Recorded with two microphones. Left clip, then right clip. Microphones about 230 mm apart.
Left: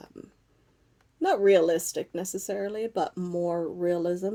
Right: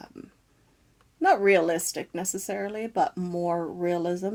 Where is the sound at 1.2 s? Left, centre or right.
Centre.